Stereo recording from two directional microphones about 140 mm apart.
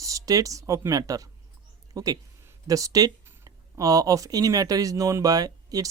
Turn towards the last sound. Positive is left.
turn(degrees=-25)  # may be behind; listen again after turning